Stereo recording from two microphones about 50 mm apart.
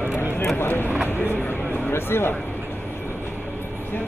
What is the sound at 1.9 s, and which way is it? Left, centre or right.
Speech, left.